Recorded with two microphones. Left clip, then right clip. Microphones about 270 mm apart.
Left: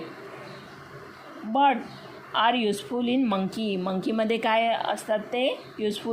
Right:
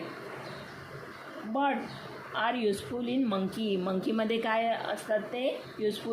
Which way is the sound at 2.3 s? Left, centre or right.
Left.